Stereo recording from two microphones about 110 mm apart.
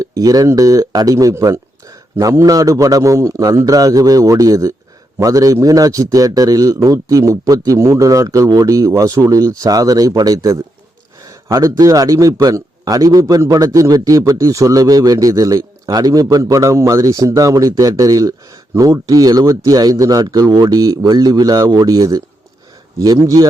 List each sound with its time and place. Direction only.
0.0 s a man's voice: 35° right (ahead or behind)